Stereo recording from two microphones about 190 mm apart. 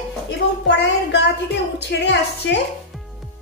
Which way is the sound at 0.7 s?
65° left (ahead or behind).